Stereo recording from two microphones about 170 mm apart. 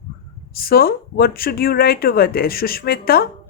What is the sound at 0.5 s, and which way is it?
Speech, 60° left (ahead or behind).